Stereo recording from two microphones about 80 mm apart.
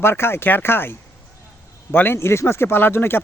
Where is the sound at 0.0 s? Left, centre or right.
Left.